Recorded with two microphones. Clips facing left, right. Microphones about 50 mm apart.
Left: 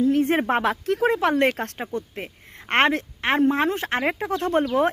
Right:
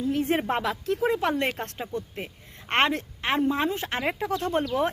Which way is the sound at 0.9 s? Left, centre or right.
Left.